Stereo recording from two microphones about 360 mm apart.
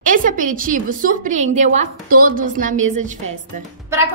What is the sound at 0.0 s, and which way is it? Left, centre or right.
A woman's voice, right.